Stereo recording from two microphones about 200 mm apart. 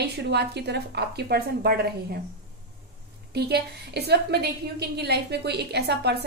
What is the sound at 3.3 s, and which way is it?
A woman's voice, 55° right (ahead or behind).